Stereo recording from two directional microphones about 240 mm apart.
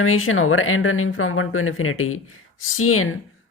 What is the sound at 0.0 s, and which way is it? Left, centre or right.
Speech, left.